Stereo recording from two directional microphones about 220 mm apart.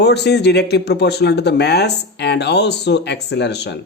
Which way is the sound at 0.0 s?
50° left (ahead or behind).